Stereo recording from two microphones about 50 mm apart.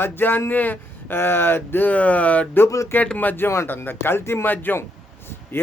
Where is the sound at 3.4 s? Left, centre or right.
Left.